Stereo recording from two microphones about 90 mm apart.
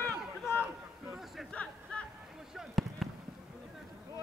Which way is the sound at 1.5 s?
10° left (ahead or behind).